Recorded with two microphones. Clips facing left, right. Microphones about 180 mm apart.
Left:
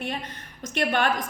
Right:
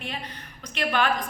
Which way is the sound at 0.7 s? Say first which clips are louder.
Left 1 dB; 50° left (ahead or behind).